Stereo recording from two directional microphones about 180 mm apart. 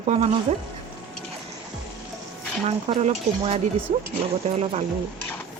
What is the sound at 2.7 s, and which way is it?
Speech, 35° right (ahead or behind).